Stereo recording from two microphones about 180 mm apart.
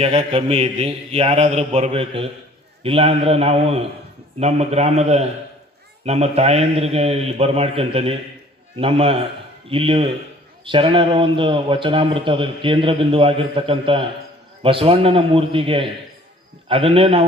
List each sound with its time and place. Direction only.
0.0 s a man's voice: 35° right (ahead or behind)